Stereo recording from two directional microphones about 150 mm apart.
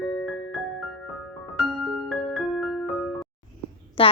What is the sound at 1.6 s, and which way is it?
Music, centre (ahead or behind).